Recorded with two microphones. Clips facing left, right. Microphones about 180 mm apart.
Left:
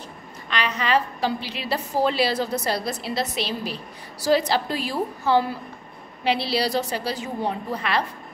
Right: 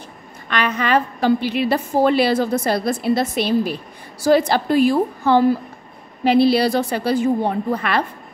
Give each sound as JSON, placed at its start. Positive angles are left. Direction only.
{"t": 0.5, "sound": "a woman's voice", "side_deg": -55}